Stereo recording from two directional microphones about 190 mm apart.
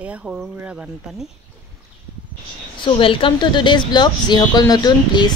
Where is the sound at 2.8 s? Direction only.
25° left (ahead or behind).